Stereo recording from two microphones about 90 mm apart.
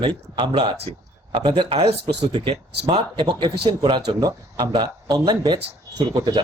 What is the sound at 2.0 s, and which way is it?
Speech, 60° right (ahead or behind).